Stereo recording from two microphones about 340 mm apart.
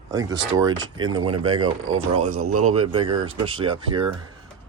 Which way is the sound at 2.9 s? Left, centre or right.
Centre.